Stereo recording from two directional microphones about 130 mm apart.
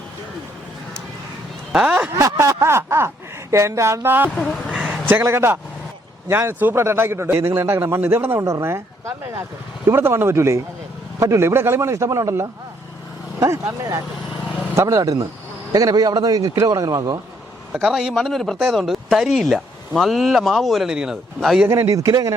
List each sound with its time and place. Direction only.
1.7 s speech: 10° right (ahead or behind)
2.1 s a man's voice: 25° right (ahead or behind)
4.4 s a man's voice: 5° left (ahead or behind); by 17.2 s 30° right (ahead or behind)
17.7 s speech: 5° right (ahead or behind)
21.7 s a man's voice: 25° right (ahead or behind)